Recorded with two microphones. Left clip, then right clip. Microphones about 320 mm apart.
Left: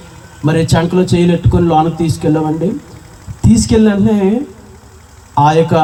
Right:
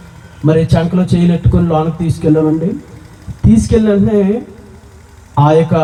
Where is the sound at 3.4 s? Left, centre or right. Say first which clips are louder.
Even; left.